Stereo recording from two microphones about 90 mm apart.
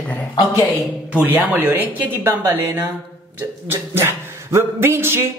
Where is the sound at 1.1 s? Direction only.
20° right (ahead or behind).